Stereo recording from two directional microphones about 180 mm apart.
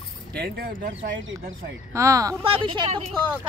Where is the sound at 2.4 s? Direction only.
30° right (ahead or behind).